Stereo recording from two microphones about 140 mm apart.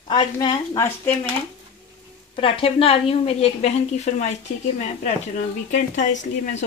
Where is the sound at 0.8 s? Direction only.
15° left (ahead or behind).